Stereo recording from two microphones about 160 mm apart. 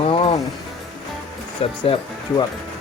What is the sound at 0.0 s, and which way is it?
Music, 35° left (ahead or behind).